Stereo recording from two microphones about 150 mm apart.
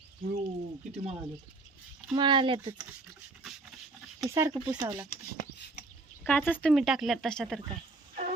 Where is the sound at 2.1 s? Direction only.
30° right (ahead or behind).